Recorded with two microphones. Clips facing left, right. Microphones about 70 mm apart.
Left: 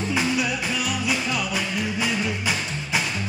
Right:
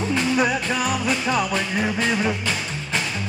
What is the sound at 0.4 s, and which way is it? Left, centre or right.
Music, right.